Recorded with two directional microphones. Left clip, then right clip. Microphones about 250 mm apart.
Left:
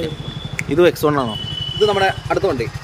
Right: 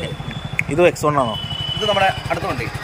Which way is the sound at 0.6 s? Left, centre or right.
Centre.